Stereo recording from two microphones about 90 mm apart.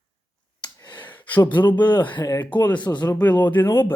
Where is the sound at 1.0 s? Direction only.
20° left (ahead or behind).